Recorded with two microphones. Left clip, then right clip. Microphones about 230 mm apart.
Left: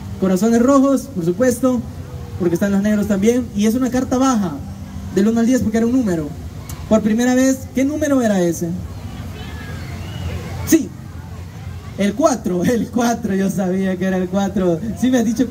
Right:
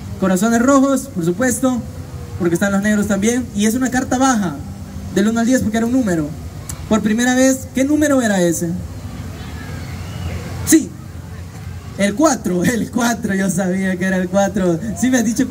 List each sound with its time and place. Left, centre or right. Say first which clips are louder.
0.2 s a man's voice: even; right
12.0 s a man's voice: right 1 dB; right